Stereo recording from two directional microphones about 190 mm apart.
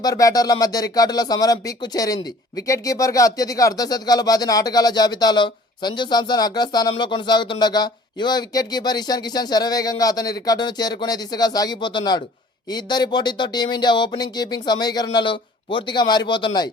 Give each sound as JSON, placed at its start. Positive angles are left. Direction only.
{"t": 0.0, "sound": "speech", "side_deg": 20}